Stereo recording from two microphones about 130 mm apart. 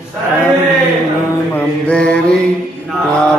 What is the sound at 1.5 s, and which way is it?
Mantra, 10° left (ahead or behind).